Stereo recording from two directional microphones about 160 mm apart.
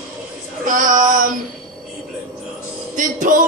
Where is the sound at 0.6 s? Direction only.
55° right (ahead or behind).